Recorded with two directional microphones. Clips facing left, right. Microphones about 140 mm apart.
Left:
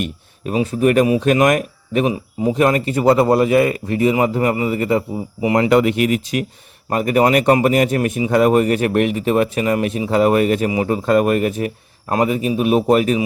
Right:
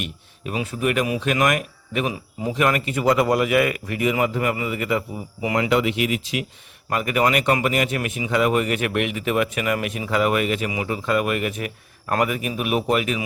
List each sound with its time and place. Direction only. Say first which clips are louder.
0.0 s speech: left 7 dB; 35° left (ahead or behind)
5.5 s speech: left 6 dB; 45° left (ahead or behind)
6.9 s a man's voice: left 6 dB; 35° left (ahead or behind)